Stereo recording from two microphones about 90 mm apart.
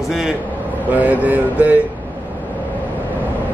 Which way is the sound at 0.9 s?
20° right (ahead or behind).